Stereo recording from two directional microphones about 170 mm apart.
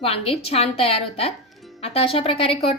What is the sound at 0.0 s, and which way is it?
Speech, 35° left (ahead or behind).